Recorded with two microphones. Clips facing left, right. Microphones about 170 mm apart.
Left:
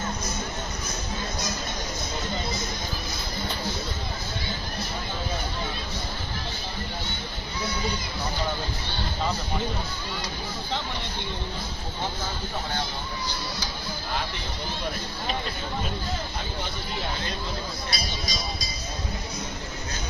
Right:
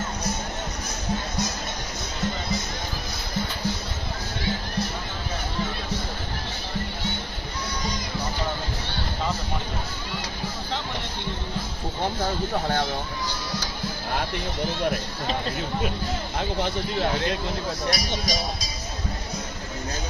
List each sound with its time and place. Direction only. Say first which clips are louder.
17.0 s speech: right 7 dB; 80° right